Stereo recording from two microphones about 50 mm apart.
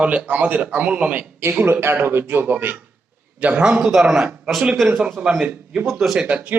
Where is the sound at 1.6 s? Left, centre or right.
Right.